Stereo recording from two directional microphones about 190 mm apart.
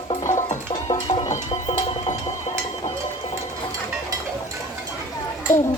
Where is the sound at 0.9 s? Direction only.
30° left (ahead or behind).